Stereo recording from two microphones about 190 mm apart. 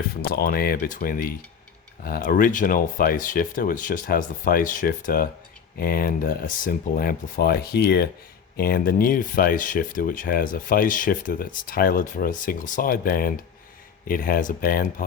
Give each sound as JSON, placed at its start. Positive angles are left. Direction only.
{"t": 0.2, "sound": "speech", "side_deg": 50}